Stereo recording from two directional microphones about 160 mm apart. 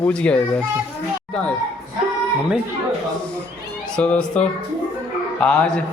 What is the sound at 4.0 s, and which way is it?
Speech, 5° left (ahead or behind).